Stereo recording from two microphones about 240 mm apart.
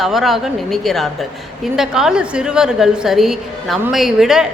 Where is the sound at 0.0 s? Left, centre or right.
Centre.